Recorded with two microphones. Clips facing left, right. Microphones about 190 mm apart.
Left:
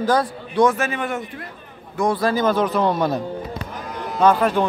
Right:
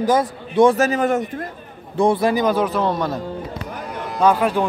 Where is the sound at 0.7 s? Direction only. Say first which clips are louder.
Right 7 dB; 40° right (ahead or behind).